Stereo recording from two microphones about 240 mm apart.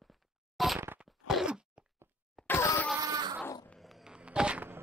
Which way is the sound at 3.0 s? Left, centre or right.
Centre.